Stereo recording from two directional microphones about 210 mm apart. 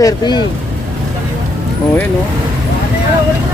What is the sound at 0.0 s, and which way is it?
Speech, 20° left (ahead or behind).